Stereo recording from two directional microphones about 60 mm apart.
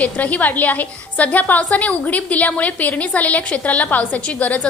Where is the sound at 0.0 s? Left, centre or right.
Left.